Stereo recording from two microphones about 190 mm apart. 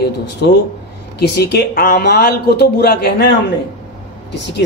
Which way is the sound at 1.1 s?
60° left (ahead or behind).